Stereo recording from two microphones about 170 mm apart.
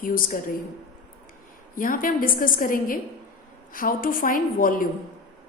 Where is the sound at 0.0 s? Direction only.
55° left (ahead or behind).